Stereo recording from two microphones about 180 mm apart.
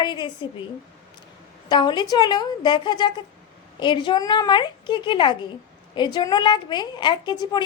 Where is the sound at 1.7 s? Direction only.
25° left (ahead or behind).